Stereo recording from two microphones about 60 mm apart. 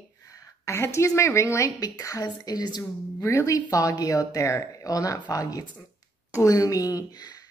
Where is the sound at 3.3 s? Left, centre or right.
Left.